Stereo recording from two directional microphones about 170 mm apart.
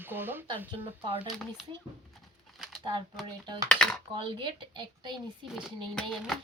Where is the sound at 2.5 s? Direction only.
Centre (ahead or behind).